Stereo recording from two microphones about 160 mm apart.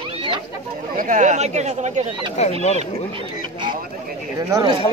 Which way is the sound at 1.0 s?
55° right (ahead or behind).